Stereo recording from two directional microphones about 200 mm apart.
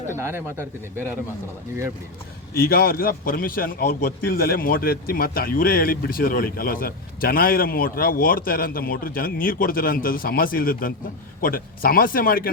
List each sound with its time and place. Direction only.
0.1 s speech: 10° right (ahead or behind)
2.6 s a man's voice: 50° left (ahead or behind)